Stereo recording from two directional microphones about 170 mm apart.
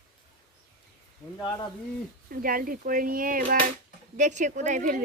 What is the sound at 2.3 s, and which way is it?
Speech, 55° right (ahead or behind).